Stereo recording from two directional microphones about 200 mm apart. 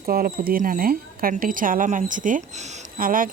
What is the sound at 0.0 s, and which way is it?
Speech, 45° right (ahead or behind).